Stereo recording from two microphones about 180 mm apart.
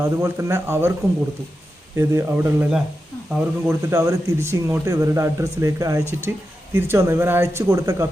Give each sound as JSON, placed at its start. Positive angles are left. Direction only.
{"t": 0.0, "sound": "speech", "side_deg": -15}
{"t": 2.0, "sound": "speech", "side_deg": -15}